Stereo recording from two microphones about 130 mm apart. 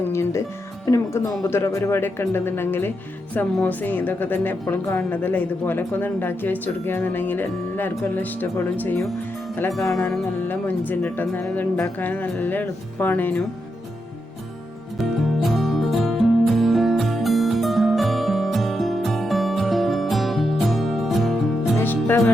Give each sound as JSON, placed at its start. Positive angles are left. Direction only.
{"t": 0.1, "sound": "music", "side_deg": 20}
{"t": 0.9, "sound": "a woman's voice", "side_deg": 20}
{"t": 10.5, "sound": "a woman's voice", "side_deg": 15}
{"t": 14.9, "sound": "music", "side_deg": 0}
{"t": 21.8, "sound": "music", "side_deg": 15}